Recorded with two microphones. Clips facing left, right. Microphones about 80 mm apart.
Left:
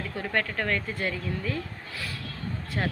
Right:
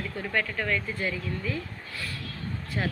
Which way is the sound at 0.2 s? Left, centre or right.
Left.